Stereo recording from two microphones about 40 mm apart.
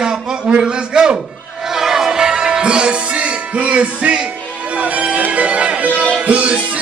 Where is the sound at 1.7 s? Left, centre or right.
Centre.